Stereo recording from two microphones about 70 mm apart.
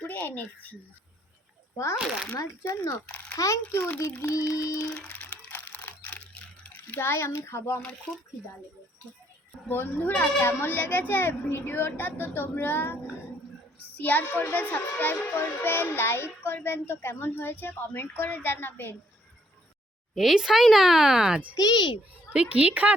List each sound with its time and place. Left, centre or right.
0.0 s a child's voice: left
1.7 s a child's voice: left
3.1 s a sound: left
3.3 s music: left
3.7 s a child's voice: left
4.2 s music: left
5.0 s a sound: left
9.6 s a child's voice: left
20.1 s speech: centre
21.5 s a child's voice: left
22.3 s a woman's voice: centre